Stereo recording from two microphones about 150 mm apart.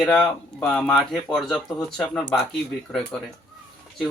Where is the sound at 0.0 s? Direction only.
5° left (ahead or behind).